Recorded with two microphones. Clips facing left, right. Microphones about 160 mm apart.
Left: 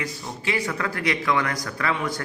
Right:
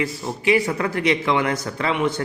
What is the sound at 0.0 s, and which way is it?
A man's voice, 25° right (ahead or behind).